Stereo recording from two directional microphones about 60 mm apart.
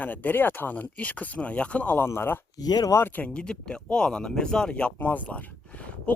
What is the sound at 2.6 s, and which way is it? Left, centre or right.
Speech, left.